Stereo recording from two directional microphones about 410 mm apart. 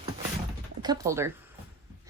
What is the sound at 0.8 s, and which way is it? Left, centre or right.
Speech, centre.